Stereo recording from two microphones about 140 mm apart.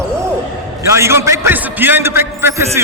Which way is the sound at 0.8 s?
20° right (ahead or behind).